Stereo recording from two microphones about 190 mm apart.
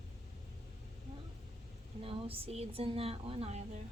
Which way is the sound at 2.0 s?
30° right (ahead or behind).